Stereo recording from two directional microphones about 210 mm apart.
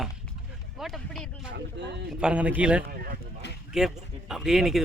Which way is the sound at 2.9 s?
45° right (ahead or behind).